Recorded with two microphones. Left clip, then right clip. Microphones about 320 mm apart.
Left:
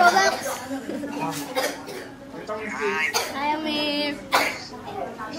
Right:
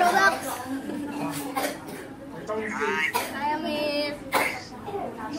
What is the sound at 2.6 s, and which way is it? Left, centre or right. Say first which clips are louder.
Throat clearing: left 2 dB; centre.